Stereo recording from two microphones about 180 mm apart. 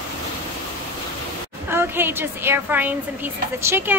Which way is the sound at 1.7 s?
10° right (ahead or behind).